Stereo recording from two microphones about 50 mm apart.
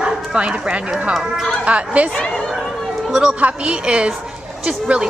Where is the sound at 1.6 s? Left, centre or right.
Right.